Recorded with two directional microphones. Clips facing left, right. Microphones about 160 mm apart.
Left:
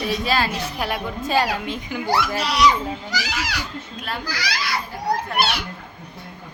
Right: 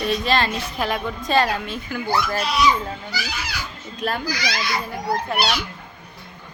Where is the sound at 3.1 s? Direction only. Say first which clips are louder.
Left 3 dB; 90° left.